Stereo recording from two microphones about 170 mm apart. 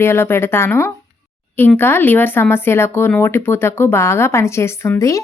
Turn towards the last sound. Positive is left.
turn(degrees=20)  # may be behind; listen again after turning